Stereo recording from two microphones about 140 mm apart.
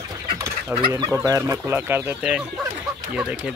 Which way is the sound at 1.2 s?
25° right (ahead or behind).